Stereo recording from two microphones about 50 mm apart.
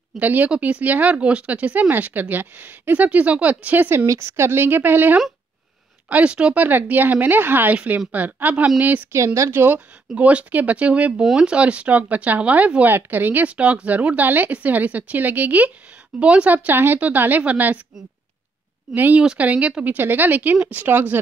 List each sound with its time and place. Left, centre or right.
0.2 s speech: right
3.9 s a woman's voice: right
4.3 s a woman's voice: right
6.0 s speech: right
6.5 s speech: right
7.7 s speech: right
9.1 s speech: right
9.5 s a woman's voice: right
10.1 s speech: right
12.8 s speech: right
13.5 s speech: right
16.2 s speech: right
16.4 s speech: right
19.1 s speech: right